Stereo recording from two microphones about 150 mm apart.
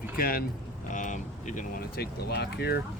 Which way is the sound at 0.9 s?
55° left (ahead or behind).